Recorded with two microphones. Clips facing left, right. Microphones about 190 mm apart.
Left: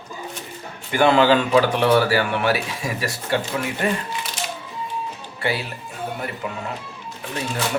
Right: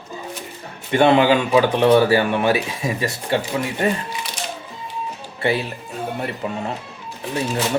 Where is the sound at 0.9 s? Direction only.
25° right (ahead or behind).